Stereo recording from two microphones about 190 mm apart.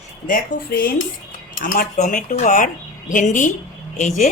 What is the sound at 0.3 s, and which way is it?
A woman's voice, 50° left (ahead or behind).